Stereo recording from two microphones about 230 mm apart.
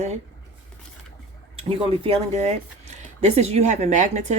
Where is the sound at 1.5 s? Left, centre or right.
Right.